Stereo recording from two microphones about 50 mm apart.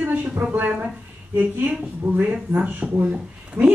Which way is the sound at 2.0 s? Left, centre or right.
Right.